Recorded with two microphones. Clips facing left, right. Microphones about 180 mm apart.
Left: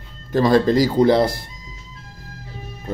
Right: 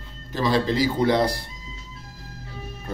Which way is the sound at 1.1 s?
25° left (ahead or behind).